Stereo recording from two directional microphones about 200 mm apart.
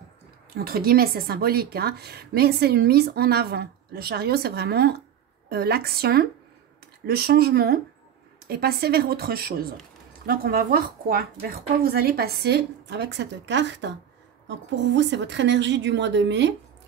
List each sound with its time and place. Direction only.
0.7 s a woman's voice: 50° right (ahead or behind)
15.0 s a woman's voice: 60° right (ahead or behind)